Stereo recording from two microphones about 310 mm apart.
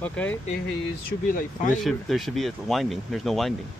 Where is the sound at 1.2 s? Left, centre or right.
Left.